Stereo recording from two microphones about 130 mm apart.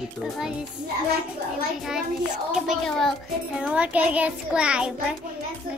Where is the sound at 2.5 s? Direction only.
Centre (ahead or behind).